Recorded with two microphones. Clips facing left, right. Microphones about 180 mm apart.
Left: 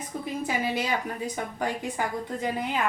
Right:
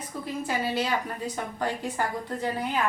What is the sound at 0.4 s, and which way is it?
A woman's voice, 15° left (ahead or behind).